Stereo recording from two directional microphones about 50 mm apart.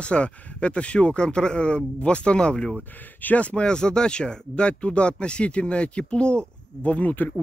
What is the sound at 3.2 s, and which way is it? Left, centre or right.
Speech, left.